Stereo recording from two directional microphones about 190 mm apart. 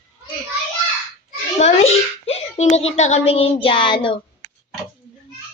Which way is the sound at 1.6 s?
35° left (ahead or behind).